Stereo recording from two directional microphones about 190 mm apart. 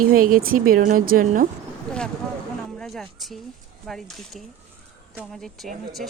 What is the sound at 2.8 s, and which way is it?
A woman's voice, centre (ahead or behind).